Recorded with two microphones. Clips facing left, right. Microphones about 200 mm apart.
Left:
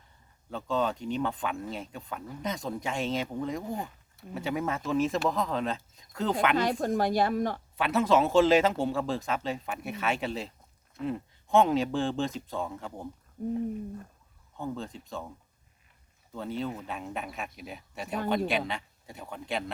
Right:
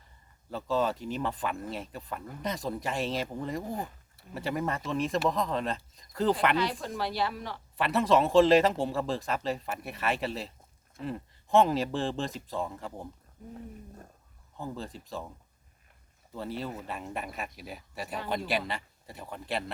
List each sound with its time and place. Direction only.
0.5 s speech: centre (ahead or behind)
6.6 s speech: 50° left (ahead or behind)
7.8 s speech: centre (ahead or behind)
13.4 s speech: 45° left (ahead or behind)
14.6 s speech: centre (ahead or behind)
16.3 s speech: centre (ahead or behind)